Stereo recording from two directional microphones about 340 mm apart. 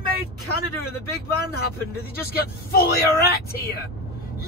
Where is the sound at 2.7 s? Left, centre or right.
Left.